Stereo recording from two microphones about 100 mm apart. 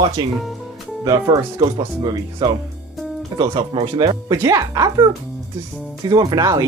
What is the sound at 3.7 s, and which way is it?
Speech, 65° right (ahead or behind).